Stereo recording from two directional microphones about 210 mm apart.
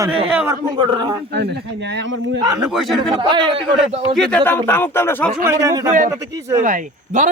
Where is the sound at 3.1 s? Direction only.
20° right (ahead or behind).